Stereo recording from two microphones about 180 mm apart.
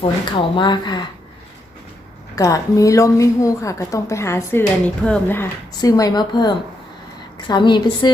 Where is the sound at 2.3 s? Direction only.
20° left (ahead or behind).